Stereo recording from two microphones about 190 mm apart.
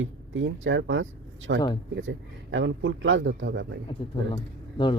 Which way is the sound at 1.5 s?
65° right (ahead or behind).